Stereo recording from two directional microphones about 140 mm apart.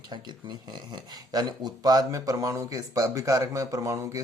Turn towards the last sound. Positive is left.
turn(degrees=-20)  # may be behind; listen again after turning